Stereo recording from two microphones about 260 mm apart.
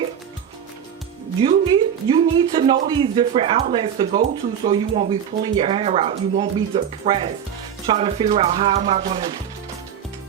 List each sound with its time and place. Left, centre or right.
1.5 s speech: centre